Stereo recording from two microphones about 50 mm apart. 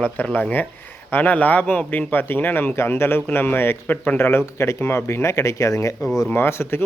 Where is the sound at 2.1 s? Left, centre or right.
Left.